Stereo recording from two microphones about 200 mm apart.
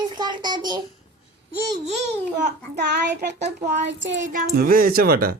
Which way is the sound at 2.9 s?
60° right (ahead or behind).